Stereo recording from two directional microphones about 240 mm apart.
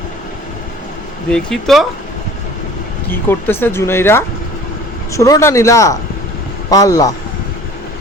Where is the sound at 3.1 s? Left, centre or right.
Centre.